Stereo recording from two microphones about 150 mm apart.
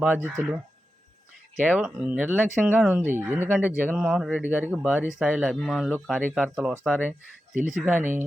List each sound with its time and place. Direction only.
0.0 s speech: 10° right (ahead or behind)
1.8 s speech: 5° right (ahead or behind)
7.5 s speech: 60° right (ahead or behind)
7.8 s speech: 10° right (ahead or behind)